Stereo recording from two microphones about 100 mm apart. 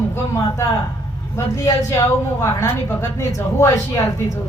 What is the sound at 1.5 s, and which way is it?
A man's voice, 35° left (ahead or behind).